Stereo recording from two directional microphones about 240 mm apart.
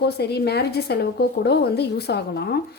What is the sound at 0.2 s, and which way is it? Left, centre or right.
A woman's voice, left.